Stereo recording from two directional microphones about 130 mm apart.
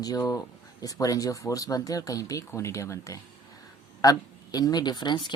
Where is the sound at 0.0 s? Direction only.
30° left (ahead or behind).